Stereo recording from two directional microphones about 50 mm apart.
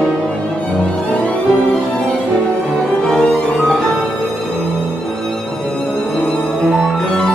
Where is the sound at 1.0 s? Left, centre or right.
Left.